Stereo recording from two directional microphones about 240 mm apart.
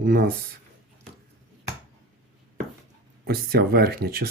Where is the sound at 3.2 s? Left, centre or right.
Right.